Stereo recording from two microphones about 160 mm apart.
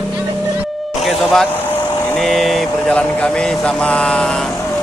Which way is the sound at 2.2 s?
Centre (ahead or behind).